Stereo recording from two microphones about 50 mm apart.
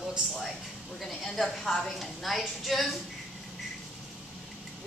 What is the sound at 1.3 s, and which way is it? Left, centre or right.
A woman's voice, centre.